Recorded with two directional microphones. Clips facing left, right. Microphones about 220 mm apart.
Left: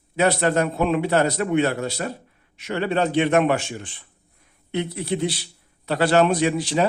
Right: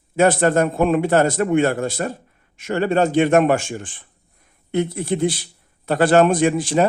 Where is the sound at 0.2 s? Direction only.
50° right (ahead or behind).